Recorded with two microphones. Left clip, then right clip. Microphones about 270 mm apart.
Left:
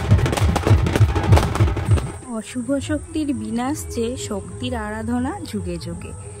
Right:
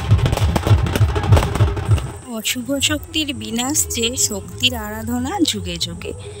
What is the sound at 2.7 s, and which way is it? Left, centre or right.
Speech, centre.